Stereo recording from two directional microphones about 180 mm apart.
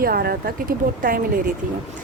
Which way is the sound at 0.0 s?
55° right (ahead or behind).